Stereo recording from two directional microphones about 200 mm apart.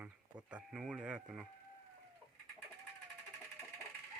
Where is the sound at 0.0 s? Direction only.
5° right (ahead or behind).